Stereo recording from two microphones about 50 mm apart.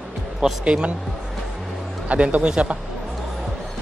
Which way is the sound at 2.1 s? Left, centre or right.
Right.